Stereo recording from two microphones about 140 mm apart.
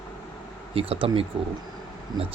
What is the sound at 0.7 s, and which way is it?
Speech, 40° right (ahead or behind).